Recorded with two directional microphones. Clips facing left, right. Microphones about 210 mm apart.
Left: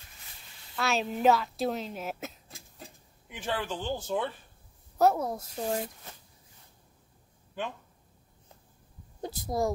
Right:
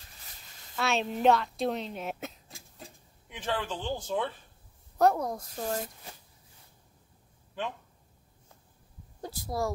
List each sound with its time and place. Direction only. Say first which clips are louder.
0.7 s speech: even; centre (ahead or behind)
9.2 s speech: left 3 dB; 20° left (ahead or behind)